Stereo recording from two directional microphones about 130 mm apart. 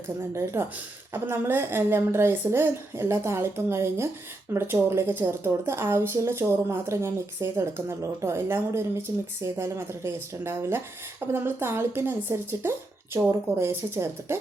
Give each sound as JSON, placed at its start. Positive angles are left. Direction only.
{"t": 0.3, "sound": "a woman's voice", "side_deg": -20}